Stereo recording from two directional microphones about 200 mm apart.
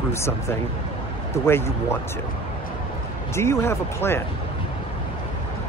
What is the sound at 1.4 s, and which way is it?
Speech, 10° left (ahead or behind).